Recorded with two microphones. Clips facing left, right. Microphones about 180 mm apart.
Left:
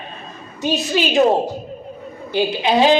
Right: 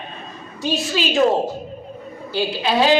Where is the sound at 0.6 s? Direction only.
20° left (ahead or behind).